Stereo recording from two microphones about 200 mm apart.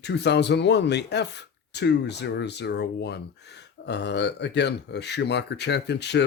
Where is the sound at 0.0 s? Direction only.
60° left (ahead or behind).